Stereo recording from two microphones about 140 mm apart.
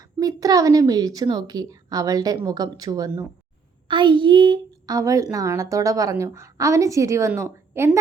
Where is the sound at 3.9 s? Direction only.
35° right (ahead or behind).